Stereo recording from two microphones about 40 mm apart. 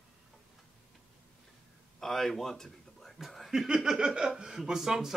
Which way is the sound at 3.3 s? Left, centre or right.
Centre.